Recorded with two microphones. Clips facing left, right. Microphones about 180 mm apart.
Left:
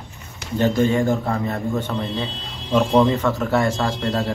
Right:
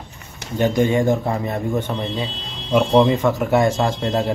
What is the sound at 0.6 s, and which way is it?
A man's voice, 15° right (ahead or behind).